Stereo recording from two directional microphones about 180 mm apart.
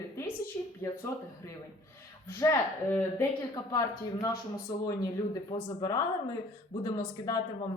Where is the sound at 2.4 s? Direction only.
15° left (ahead or behind).